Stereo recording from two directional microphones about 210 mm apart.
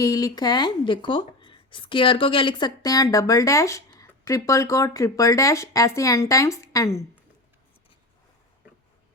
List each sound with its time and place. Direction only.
0.0 s speech: 15° left (ahead or behind)